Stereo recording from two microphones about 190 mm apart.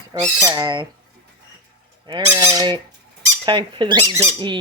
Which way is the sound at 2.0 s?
25° right (ahead or behind).